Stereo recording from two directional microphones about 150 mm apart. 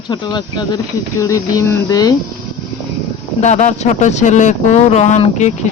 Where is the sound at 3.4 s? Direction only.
50° left (ahead or behind).